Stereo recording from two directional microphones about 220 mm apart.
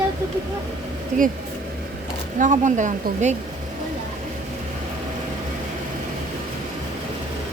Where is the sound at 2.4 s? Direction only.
35° right (ahead or behind).